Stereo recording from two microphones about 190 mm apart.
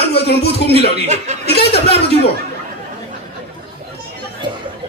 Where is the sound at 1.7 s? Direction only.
30° left (ahead or behind).